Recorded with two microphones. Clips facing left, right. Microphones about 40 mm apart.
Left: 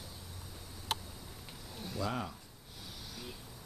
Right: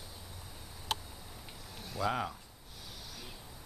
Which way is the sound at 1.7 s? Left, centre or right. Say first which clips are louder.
Even; centre.